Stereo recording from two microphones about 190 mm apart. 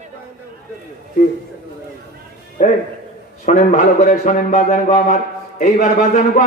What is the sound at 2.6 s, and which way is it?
Speech, 40° left (ahead or behind).